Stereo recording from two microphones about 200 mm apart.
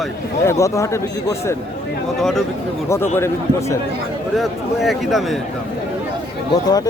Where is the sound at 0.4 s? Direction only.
15° left (ahead or behind).